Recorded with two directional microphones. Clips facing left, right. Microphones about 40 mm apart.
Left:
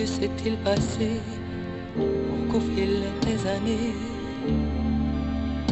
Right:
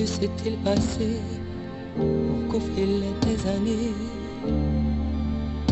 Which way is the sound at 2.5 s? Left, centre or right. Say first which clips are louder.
Even; left.